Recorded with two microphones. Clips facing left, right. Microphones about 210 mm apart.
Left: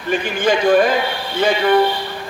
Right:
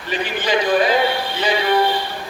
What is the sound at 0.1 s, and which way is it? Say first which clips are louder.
Speech: left 3 dB; 50° left (ahead or behind).